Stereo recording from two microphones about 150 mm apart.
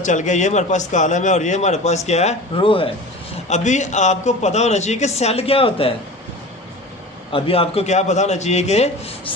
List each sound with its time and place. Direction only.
0.0 s a man's voice: 55° left (ahead or behind); by 2.9 s 35° left (ahead or behind)
3.5 s a man's voice: 50° left (ahead or behind)
7.3 s a man's voice: 40° left (ahead or behind)